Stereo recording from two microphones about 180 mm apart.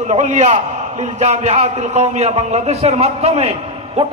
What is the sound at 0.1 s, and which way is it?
A man's voice, 40° right (ahead or behind).